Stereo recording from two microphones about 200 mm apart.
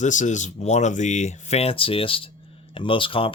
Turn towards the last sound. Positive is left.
turn(degrees=25)  # may be behind; listen again after turning